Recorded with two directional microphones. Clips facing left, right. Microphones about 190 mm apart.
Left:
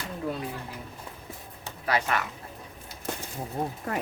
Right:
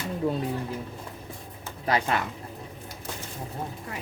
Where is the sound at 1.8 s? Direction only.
30° right (ahead or behind).